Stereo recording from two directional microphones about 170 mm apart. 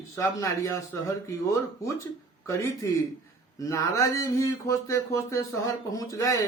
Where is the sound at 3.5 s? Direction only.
20° left (ahead or behind).